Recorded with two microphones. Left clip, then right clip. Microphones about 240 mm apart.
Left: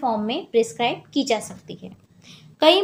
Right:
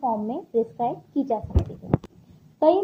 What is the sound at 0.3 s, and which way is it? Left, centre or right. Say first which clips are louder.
A woman's voice: left 4 dB; left.